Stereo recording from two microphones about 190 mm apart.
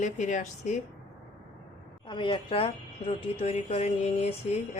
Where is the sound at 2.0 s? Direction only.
25° left (ahead or behind).